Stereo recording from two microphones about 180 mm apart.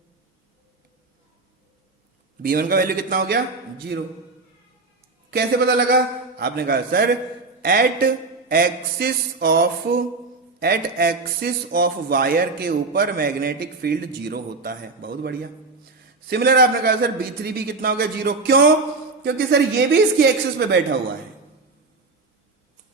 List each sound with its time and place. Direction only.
2.4 s speech: 50° right (ahead or behind)
5.3 s a woman's voice: 60° right (ahead or behind)